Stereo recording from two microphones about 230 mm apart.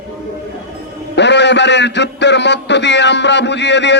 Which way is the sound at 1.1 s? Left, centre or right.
Left.